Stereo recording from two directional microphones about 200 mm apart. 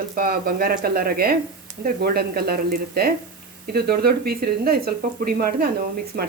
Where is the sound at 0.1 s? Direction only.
45° right (ahead or behind).